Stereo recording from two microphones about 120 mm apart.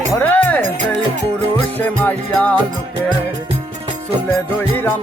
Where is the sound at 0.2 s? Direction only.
15° left (ahead or behind).